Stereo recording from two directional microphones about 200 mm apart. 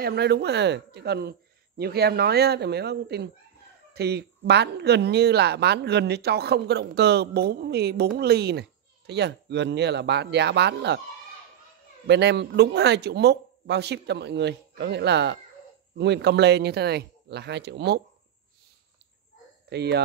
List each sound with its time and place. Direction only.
0.0 s speech: 55° right (ahead or behind)
12.1 s speech: 60° right (ahead or behind)
19.7 s speech: 55° right (ahead or behind)